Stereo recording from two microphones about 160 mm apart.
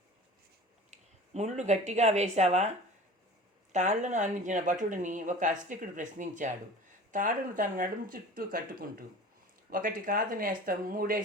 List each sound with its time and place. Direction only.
0.9 s speech: 45° right (ahead or behind); by 11.2 s 60° right (ahead or behind)